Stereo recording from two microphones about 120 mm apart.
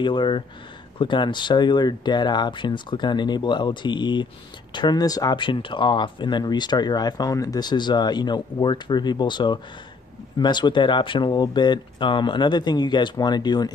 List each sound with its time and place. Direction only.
0.0 s speech: 40° left (ahead or behind)